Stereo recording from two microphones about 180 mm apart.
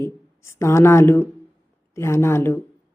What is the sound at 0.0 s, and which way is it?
A woman's voice, 15° left (ahead or behind).